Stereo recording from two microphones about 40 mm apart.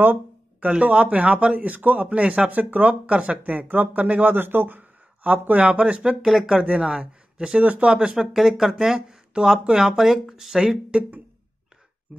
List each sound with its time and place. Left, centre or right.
0.6 s speech: right
2.5 s speech: right
3.6 s speech: right
4.0 s speech: right
4.3 s speech: right
5.2 s speech: right
7.6 s speech: right
7.9 s speech: right
8.2 s speech: centre
12.1 s speech: centre